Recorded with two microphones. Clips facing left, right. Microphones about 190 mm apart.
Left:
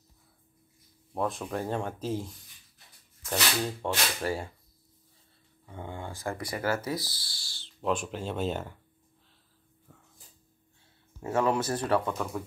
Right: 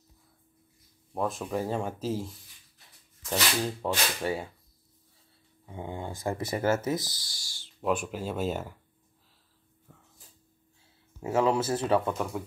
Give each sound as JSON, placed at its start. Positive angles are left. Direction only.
{"t": 1.1, "sound": "speech", "side_deg": 0}
{"t": 5.7, "sound": "speech", "side_deg": -15}
{"t": 7.5, "sound": "a sound", "side_deg": -10}
{"t": 8.1, "sound": "speech", "side_deg": -5}
{"t": 9.9, "sound": "dog", "side_deg": 0}
{"t": 11.5, "sound": "speech", "side_deg": -5}